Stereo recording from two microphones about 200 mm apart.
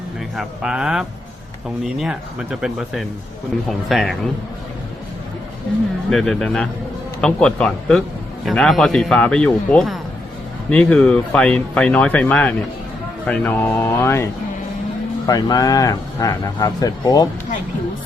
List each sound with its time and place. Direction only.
0.3 s speech: 5° right (ahead or behind)
6.1 s speech: centre (ahead or behind)
15.3 s speech: 20° left (ahead or behind)